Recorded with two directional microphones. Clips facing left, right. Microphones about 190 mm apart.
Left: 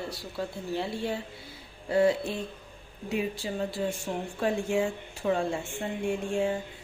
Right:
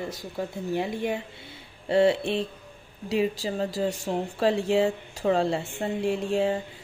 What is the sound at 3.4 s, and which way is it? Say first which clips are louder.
Speech: right 3 dB; 40° right (ahead or behind).